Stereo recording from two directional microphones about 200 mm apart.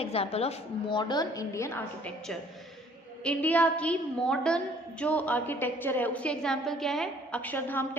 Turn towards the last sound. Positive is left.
turn(degrees=10)  # may be behind; listen again after turning